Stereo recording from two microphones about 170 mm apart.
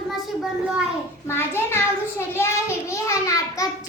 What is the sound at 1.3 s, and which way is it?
Child singing, 15° left (ahead or behind).